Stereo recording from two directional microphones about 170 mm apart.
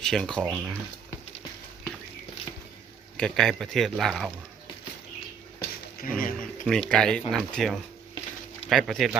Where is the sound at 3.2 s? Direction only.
5° left (ahead or behind).